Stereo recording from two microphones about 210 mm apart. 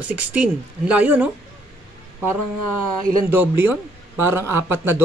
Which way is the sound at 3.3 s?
10° right (ahead or behind).